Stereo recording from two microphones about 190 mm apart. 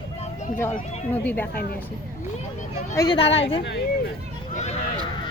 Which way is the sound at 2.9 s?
15° left (ahead or behind).